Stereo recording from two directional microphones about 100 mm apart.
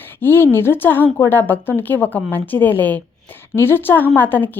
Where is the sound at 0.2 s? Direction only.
20° left (ahead or behind).